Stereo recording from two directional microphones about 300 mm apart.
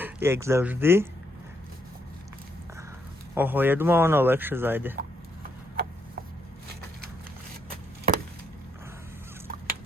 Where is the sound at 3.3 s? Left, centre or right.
Centre.